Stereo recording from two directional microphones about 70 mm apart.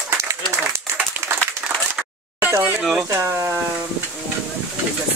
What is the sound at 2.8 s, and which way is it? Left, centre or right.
Speech, centre.